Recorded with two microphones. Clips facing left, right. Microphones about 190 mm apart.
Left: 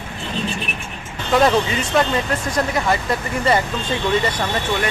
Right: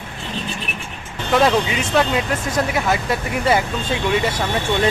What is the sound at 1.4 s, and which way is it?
Speech, centre (ahead or behind).